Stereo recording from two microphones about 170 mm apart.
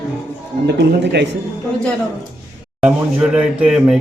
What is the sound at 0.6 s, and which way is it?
Speech, 85° right.